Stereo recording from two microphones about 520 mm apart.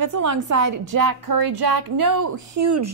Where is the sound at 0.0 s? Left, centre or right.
Right.